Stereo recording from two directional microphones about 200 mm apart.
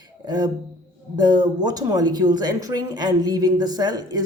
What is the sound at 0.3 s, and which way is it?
Speech, 20° right (ahead or behind).